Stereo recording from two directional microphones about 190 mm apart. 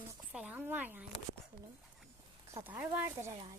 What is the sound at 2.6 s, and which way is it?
Speech, 10° right (ahead or behind).